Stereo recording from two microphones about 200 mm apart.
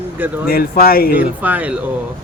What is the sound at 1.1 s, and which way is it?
Speech, 10° right (ahead or behind).